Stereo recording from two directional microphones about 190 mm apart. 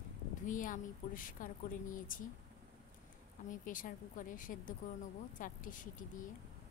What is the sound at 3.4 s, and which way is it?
A woman's voice, 45° left (ahead or behind).